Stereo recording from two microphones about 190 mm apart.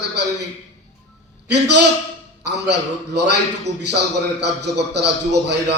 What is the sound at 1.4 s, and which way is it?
A man's voice, 65° right (ahead or behind).